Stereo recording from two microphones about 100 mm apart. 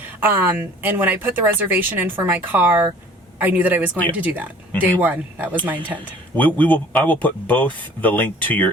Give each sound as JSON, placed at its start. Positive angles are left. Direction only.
{"t": 0.2, "sound": "a woman's voice", "side_deg": -20}
{"t": 6.3, "sound": "speech", "side_deg": 15}